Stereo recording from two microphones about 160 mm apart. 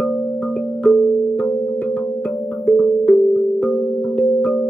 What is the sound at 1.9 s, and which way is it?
Music, 10° left (ahead or behind).